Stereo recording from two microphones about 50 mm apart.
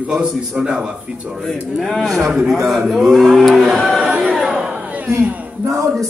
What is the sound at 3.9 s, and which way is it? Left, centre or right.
Speech, centre.